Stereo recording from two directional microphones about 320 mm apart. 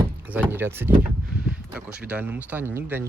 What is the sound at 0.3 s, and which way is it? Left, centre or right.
Speech, centre.